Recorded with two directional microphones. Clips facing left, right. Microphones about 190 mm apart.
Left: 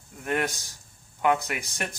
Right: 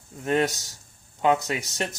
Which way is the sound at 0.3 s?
20° right (ahead or behind).